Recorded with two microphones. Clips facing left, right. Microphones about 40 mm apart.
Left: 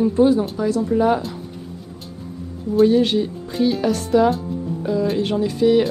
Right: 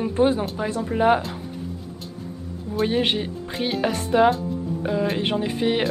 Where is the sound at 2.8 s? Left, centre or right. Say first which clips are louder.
Left 7 dB; right.